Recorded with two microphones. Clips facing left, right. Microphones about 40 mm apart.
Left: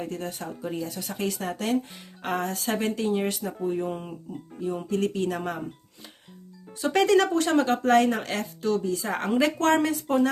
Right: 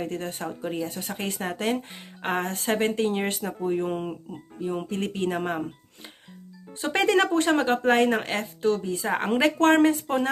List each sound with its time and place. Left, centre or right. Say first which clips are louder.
0.0 s speech: right 2 dB; right